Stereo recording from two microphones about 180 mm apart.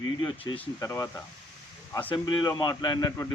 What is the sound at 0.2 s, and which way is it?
Speech, 25° left (ahead or behind).